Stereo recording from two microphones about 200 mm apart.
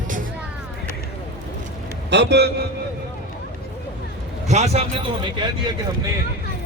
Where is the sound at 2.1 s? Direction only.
55° right (ahead or behind).